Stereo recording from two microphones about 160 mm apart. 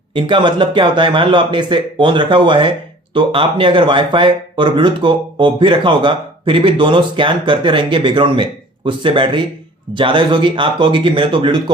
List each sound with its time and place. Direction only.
0.1 s speech: 30° right (ahead or behind)